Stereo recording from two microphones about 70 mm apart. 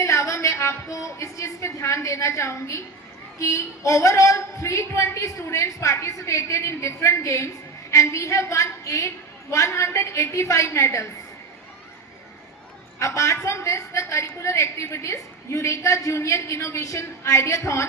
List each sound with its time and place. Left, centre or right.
0.0 s music: left
0.9 s a woman's voice: left
13.0 s a woman's voice: left